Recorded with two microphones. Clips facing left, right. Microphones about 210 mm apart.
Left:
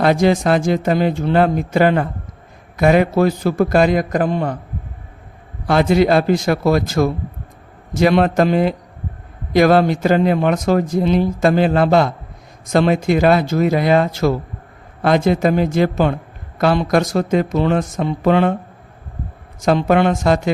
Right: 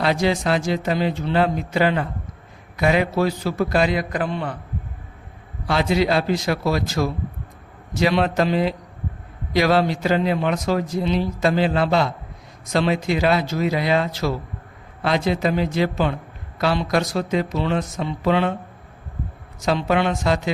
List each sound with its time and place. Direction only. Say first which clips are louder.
0.0 s a man's voice: left 6 dB; 50° left (ahead or behind)
5.6 s a man's voice: left 6 dB; 50° left (ahead or behind)
19.6 s a man's voice: left 6 dB; 50° left (ahead or behind)